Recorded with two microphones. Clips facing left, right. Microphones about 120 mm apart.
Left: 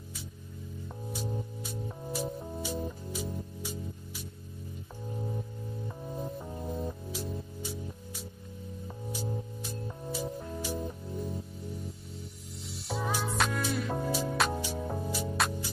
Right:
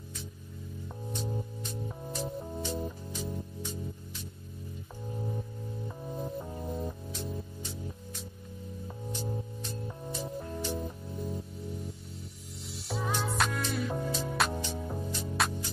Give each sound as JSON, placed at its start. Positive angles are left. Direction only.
{"t": 1.1, "sound": "music", "side_deg": 5}
{"t": 5.9, "sound": "music", "side_deg": 0}
{"t": 12.7, "sound": "music", "side_deg": 0}